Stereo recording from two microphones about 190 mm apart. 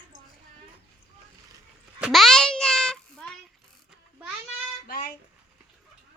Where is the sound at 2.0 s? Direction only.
Centre (ahead or behind).